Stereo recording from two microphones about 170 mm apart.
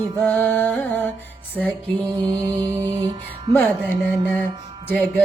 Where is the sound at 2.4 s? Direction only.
20° right (ahead or behind).